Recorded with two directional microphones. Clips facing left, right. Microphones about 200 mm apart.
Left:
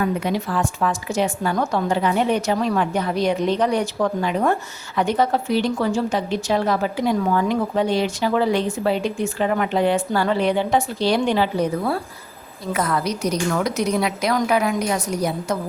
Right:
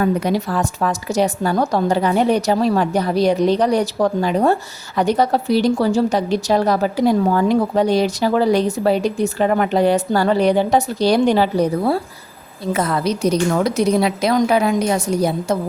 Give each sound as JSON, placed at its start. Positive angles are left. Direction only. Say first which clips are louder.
{"t": 0.0, "sound": "a woman's voice", "louder": "right 4 dB", "side_deg": -40}